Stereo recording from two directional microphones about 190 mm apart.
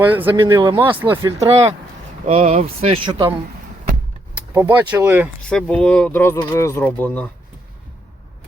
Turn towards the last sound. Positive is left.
turn(degrees=10)  # may be behind; listen again after turning